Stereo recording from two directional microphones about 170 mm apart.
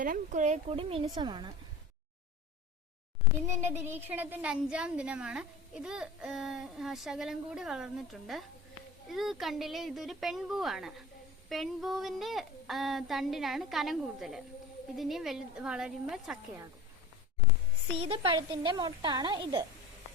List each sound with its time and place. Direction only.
0.0 s a child's voice: 50° right (ahead or behind); by 1.5 s 25° right (ahead or behind)
3.6 s a woman's voice: 15° right (ahead or behind)
17.9 s a child's voice: 35° right (ahead or behind)